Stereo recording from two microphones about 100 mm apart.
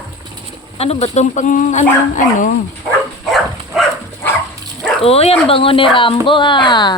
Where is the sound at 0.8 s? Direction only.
90° left.